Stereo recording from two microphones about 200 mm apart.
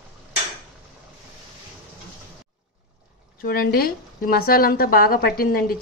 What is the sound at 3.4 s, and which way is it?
A woman's voice, 50° left (ahead or behind).